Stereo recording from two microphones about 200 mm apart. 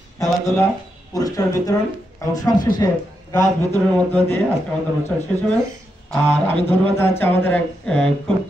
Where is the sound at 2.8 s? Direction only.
15° left (ahead or behind).